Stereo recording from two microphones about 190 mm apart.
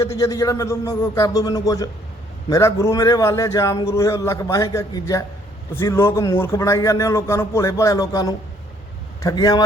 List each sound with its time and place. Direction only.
0.0 s a man's voice: 15° left (ahead or behind)